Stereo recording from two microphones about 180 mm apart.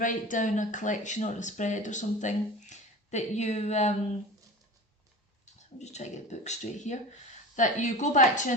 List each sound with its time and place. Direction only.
0.0 s speech: 45° left (ahead or behind)
5.8 s speech: 40° left (ahead or behind)